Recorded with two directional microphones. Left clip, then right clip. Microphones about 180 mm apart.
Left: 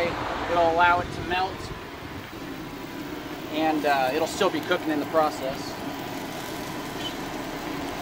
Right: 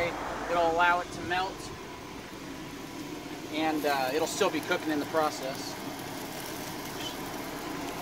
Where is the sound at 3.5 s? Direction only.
20° right (ahead or behind).